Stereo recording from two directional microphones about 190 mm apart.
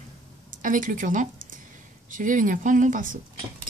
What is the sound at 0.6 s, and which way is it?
A woman's voice, 45° right (ahead or behind).